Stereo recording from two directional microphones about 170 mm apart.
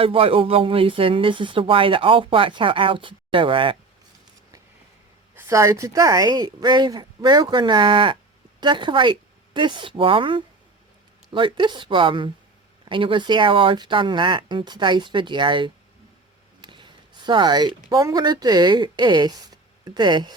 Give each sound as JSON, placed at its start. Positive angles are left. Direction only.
{"t": 0.0, "sound": "speech", "side_deg": -35}
{"t": 5.3, "sound": "a woman's voice", "side_deg": -15}